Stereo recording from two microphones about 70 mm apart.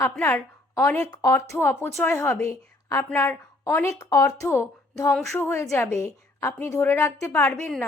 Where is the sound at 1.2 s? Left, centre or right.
Left.